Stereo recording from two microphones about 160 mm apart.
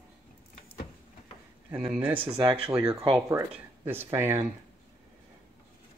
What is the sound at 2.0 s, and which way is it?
Speech, 30° right (ahead or behind).